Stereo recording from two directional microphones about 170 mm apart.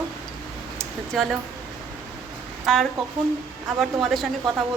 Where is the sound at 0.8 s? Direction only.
Centre (ahead or behind).